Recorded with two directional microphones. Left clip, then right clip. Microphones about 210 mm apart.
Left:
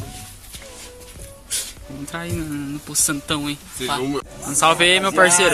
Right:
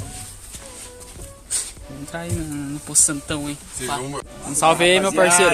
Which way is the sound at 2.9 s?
15° right (ahead or behind).